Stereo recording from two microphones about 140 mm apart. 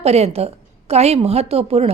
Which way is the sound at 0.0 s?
45° right (ahead or behind).